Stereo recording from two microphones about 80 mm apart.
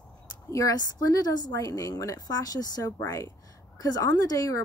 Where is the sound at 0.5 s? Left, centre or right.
Left.